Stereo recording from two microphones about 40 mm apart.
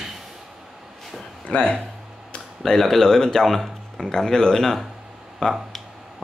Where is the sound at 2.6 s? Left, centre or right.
Centre.